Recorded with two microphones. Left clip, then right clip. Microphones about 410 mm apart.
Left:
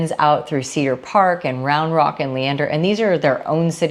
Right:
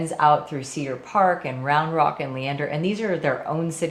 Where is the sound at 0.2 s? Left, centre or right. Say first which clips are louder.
Left 2 dB; left.